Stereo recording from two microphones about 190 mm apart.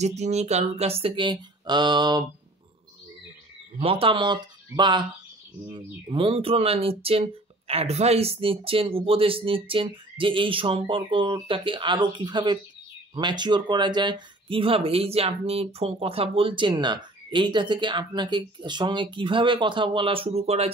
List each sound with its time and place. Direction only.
0.0 s speech: 35° right (ahead or behind)
3.8 s speech: 30° right (ahead or behind)